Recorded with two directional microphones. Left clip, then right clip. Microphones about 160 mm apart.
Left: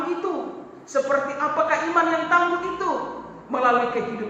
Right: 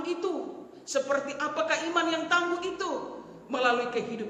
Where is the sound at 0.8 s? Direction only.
55° right (ahead or behind).